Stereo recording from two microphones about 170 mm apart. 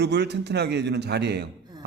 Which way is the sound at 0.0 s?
80° right.